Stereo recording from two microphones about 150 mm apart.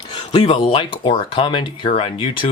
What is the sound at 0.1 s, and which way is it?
Speech, 35° left (ahead or behind).